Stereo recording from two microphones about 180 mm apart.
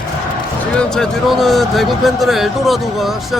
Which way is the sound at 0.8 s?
5° left (ahead or behind).